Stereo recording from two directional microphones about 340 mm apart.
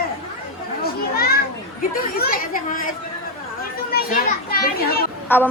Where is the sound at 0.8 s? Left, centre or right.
Left.